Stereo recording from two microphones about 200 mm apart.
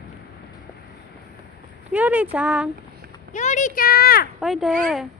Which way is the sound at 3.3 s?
40° left (ahead or behind).